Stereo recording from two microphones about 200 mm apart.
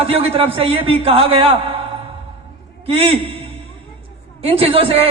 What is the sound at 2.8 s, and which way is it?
Speech, 30° right (ahead or behind).